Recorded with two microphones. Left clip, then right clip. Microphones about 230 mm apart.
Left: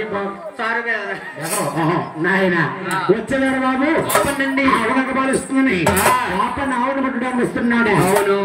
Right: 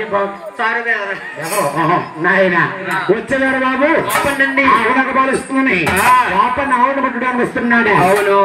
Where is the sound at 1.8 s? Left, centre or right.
Centre.